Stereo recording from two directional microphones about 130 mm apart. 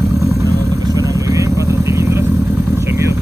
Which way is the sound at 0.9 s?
25° right (ahead or behind).